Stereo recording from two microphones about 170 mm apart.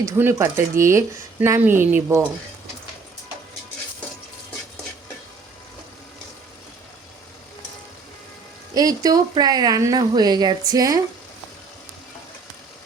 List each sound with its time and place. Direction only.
0.0 s speech: 15° right (ahead or behind)
8.7 s speech: 20° right (ahead or behind)